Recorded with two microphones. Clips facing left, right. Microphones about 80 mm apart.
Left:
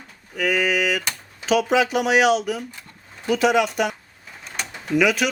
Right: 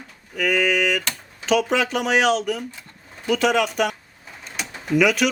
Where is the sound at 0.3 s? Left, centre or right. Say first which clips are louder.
Right 1 dB; centre.